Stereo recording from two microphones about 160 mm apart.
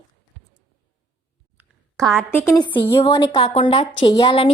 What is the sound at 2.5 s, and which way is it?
A woman's voice, 25° left (ahead or behind).